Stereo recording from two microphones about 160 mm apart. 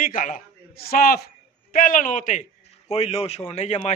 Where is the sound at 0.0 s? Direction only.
55° left (ahead or behind).